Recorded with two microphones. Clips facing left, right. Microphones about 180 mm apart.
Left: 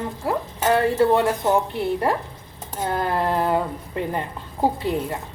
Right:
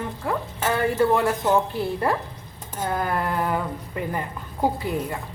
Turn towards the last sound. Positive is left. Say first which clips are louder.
# left 2 dB
turn(degrees=25)  # may be behind; listen again after turning